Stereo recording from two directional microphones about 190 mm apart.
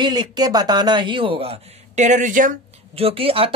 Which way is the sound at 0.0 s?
20° right (ahead or behind).